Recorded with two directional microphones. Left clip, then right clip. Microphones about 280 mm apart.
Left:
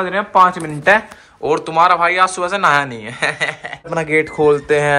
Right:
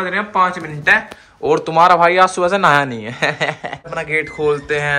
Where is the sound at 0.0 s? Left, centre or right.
Centre.